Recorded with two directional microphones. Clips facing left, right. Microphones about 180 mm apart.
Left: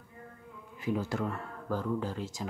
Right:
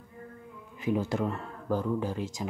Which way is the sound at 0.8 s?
20° right (ahead or behind).